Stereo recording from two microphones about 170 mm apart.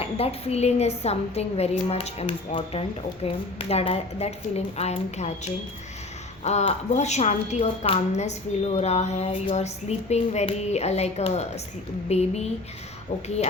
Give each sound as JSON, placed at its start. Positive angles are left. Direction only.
{"t": 0.0, "sound": "a woman's voice", "side_deg": 35}
{"t": 6.4, "sound": "a woman's voice", "side_deg": 40}